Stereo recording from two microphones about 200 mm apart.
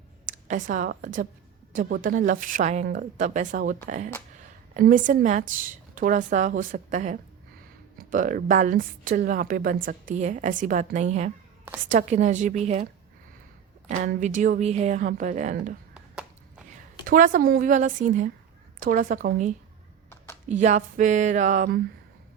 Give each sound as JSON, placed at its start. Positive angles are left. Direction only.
{"t": 0.3, "sound": "a woman's voice", "side_deg": -40}
{"t": 14.1, "sound": "a woman's voice", "side_deg": -40}
{"t": 17.1, "sound": "a woman's voice", "side_deg": -40}